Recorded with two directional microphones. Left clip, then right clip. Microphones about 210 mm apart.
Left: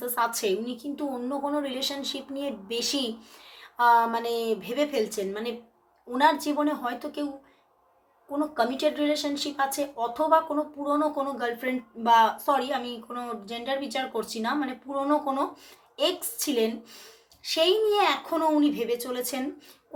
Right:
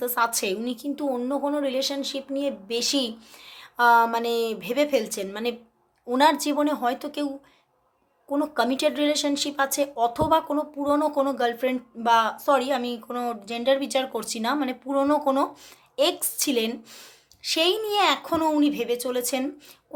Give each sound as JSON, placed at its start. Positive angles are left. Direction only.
{"t": 0.0, "sound": "a woman's voice", "side_deg": -45}
{"t": 8.3, "sound": "speech", "side_deg": -50}